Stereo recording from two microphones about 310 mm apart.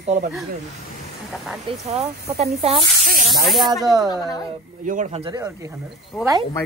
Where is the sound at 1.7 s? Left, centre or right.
Centre.